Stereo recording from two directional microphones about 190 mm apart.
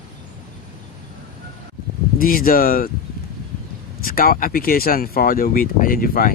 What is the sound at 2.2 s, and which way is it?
Speech, 50° left (ahead or behind).